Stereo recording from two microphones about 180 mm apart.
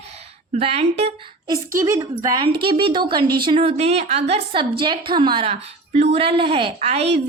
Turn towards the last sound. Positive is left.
turn(degrees=-35)  # may be behind; listen again after turning